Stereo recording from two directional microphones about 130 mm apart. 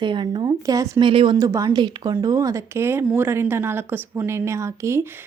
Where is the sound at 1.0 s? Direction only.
40° right (ahead or behind).